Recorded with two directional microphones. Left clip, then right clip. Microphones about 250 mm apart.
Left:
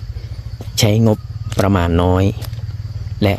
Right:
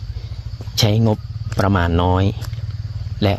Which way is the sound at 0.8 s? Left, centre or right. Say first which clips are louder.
Left 3 dB; centre.